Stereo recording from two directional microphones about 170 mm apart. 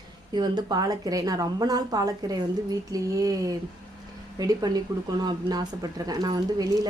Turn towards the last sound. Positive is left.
turn(degrees=-20)  # may be behind; listen again after turning